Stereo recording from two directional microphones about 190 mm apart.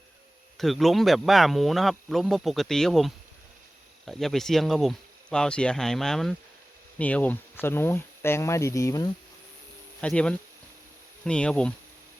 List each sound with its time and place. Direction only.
0.5 s speech: centre (ahead or behind); by 9.0 s 15° left (ahead or behind)
10.0 s speech: 5° left (ahead or behind)